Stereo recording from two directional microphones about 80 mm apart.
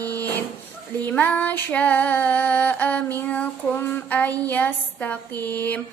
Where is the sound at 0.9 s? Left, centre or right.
Left.